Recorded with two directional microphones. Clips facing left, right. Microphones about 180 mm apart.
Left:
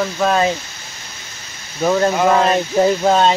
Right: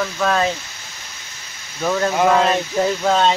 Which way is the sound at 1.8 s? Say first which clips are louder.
Left 4 dB; 15° left (ahead or behind).